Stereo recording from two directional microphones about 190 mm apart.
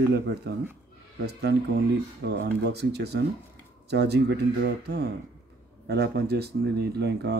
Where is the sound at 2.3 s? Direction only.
60° right (ahead or behind).